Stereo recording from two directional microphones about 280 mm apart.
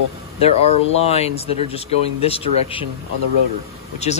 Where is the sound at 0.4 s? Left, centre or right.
Left.